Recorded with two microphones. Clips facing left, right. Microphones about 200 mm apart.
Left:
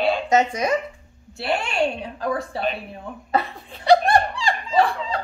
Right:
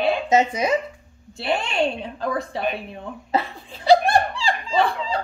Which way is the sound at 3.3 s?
30° right (ahead or behind).